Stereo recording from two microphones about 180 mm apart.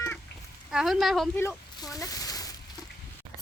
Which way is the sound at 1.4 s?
15° left (ahead or behind).